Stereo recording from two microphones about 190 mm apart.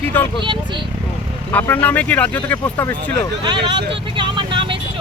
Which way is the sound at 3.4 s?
25° right (ahead or behind).